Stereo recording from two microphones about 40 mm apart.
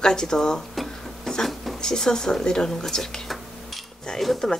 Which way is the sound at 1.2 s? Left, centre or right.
Centre.